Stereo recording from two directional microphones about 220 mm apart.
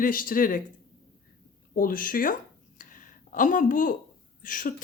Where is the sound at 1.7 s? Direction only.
40° left (ahead or behind).